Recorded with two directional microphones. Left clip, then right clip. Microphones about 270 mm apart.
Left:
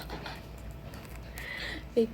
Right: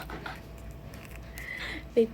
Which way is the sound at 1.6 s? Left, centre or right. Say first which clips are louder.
Right 3 dB; centre.